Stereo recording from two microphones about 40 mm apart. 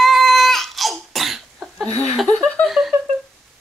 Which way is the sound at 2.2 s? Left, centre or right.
Left.